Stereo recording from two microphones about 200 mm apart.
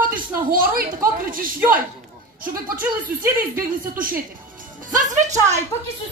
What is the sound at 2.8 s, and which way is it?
Speech, 10° right (ahead or behind).